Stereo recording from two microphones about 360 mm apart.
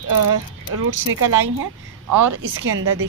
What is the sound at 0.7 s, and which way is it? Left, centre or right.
Speech, right.